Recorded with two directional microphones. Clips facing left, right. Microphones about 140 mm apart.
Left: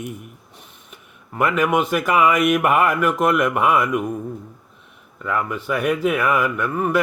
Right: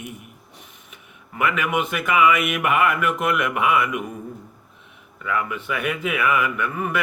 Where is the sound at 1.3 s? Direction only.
40° left (ahead or behind).